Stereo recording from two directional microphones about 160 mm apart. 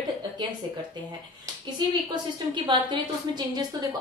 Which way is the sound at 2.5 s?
25° right (ahead or behind).